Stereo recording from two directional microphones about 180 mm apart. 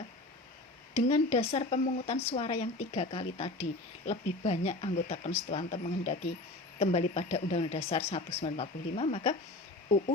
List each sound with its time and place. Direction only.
0.9 s speech: 35° left (ahead or behind)